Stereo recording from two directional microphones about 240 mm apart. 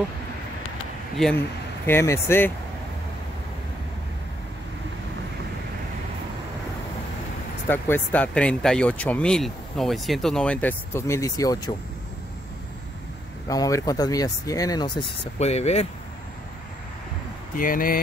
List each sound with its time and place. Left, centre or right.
1.1 s speech: centre
7.6 s speech: centre
13.5 s speech: centre
17.6 s speech: left